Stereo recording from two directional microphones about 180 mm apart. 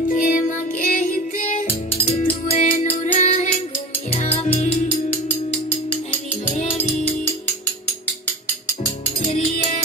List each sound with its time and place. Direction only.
0.1 s music: 50° left (ahead or behind)